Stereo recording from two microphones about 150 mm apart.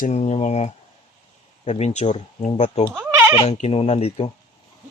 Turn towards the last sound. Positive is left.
turn(degrees=40)  # may be behind; listen again after turning